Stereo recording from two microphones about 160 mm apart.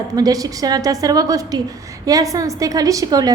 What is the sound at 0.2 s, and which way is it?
A woman's voice, 25° right (ahead or behind).